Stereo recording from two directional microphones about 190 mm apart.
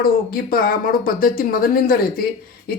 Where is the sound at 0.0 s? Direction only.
50° left (ahead or behind).